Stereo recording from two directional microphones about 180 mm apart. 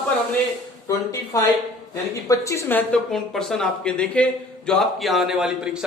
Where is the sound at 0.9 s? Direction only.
20° left (ahead or behind).